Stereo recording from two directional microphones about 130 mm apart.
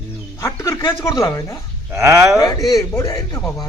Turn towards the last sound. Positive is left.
turn(degrees=25)  # may be behind; listen again after turning